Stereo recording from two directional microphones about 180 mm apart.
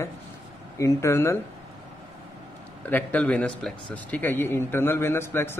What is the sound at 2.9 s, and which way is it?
A man's voice, 10° left (ahead or behind).